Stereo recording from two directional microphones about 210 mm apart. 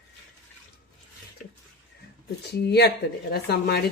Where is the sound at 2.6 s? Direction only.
50° left (ahead or behind).